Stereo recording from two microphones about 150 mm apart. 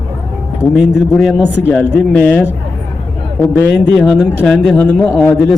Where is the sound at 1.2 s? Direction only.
5° right (ahead or behind).